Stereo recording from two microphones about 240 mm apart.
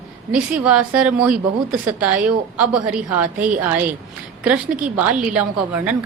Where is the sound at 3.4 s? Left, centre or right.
Right.